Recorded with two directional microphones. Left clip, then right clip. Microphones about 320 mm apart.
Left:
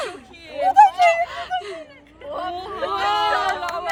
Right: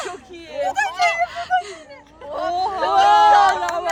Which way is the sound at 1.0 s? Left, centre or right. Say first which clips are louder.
Left 2 dB; centre.